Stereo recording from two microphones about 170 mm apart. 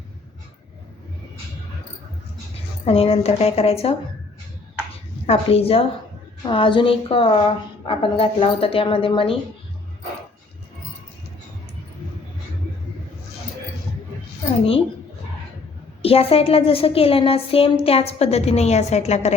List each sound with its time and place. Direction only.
2.8 s speech: 35° left (ahead or behind)
5.2 s speech: 35° left (ahead or behind)
16.0 s speech: 35° left (ahead or behind)